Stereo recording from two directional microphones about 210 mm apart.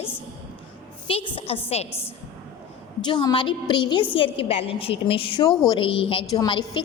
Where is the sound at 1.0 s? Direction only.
25° left (ahead or behind).